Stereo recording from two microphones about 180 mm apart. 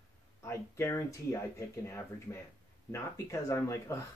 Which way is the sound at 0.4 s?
15° left (ahead or behind).